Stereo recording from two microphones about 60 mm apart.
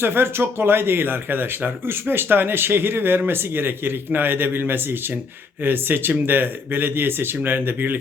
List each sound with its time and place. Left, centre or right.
0.0 s speech: right